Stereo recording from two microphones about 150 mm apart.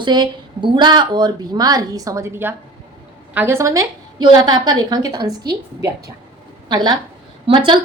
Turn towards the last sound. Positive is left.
turn(degrees=-30)  # may be behind; listen again after turning